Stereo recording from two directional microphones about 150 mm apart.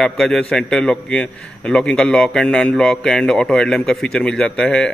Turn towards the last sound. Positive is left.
turn(degrees=5)  # may be behind; listen again after turning